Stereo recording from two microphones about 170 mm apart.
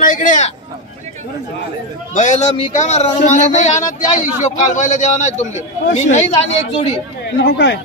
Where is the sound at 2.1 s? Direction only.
45° left (ahead or behind).